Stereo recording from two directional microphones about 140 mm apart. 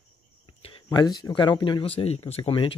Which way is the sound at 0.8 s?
30° left (ahead or behind).